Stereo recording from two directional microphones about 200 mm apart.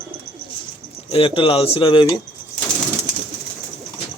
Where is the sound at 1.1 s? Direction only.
25° left (ahead or behind).